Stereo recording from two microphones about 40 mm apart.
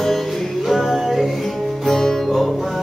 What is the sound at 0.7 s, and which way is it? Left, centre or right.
Music, centre.